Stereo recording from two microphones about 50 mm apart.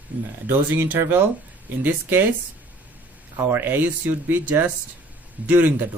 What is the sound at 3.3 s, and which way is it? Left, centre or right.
Speech, right.